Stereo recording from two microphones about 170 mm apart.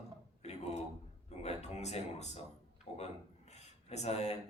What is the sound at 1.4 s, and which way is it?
Speech, 40° left (ahead or behind).